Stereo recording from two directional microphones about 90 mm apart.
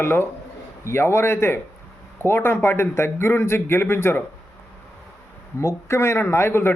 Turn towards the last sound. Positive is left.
turn(degrees=25)  # may be behind; listen again after turning